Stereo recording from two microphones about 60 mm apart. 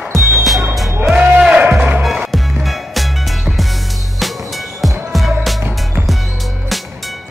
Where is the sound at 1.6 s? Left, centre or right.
Centre.